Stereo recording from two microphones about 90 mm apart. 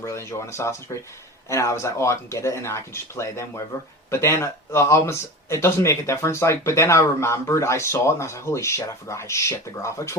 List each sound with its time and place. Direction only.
0.0 s speech: 30° left (ahead or behind)